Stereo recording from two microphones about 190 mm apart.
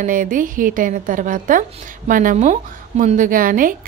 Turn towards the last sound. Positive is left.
turn(degrees=-45)  # may be behind; listen again after turning